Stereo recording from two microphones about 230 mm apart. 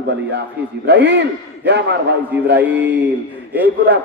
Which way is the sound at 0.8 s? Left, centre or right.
Right.